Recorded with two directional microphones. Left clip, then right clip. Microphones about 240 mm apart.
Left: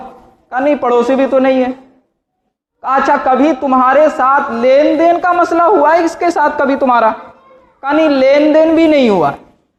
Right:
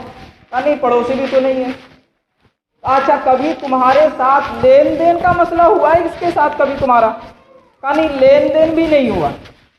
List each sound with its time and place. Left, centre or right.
0.5 s a woman's voice: left
2.8 s a woman's voice: left